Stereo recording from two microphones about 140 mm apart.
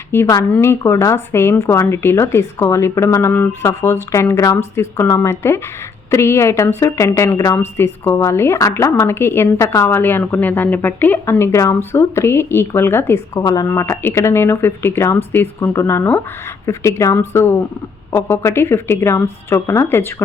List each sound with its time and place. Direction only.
0.1 s a woman's voice: 20° left (ahead or behind)